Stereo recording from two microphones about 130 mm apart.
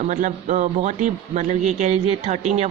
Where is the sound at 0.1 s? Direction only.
70° right (ahead or behind).